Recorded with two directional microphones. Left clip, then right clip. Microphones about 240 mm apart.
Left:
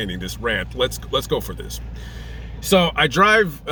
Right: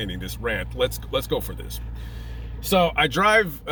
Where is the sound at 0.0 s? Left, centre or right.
Centre.